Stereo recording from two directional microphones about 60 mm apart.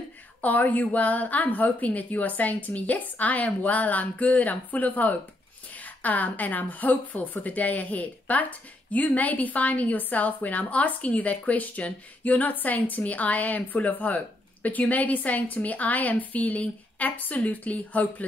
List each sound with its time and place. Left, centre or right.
0.4 s a woman's voice: left